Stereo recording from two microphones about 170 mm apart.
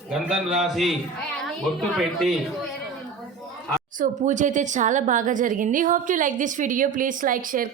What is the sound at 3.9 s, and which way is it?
A woman's voice, 50° right (ahead or behind).